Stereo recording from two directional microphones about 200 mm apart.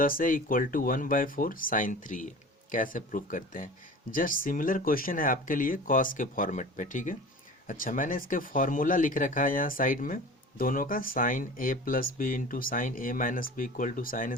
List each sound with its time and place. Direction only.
0.0 s speech: 45° left (ahead or behind)